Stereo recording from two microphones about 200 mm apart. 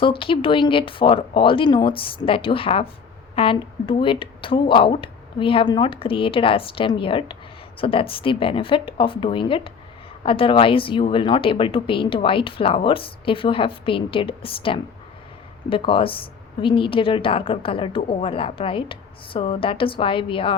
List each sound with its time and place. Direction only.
0.0 s a woman's voice: 25° left (ahead or behind)